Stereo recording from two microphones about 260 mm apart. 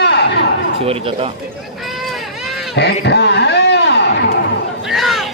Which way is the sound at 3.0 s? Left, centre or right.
Left.